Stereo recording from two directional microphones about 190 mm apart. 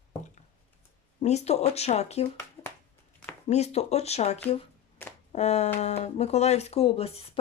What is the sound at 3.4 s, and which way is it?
Speech, 35° left (ahead or behind).